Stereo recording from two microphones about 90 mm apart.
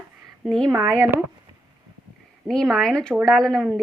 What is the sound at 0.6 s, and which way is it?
Speech, 35° right (ahead or behind).